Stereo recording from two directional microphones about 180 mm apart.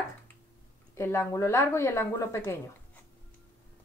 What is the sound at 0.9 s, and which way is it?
A woman's voice, 15° left (ahead or behind).